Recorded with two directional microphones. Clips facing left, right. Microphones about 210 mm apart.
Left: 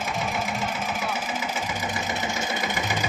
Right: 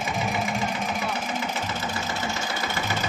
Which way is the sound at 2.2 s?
15° left (ahead or behind).